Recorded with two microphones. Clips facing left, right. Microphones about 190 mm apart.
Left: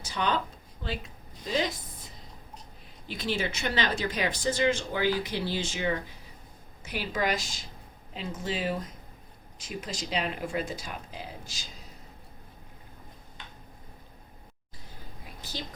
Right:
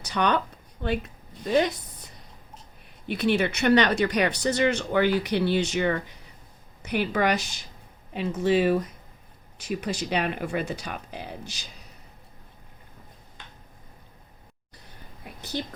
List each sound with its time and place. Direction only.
0.0 s a sound: 65° right (ahead or behind)
0.8 s speech: 60° right (ahead or behind)
3.1 s speech: 65° right (ahead or behind)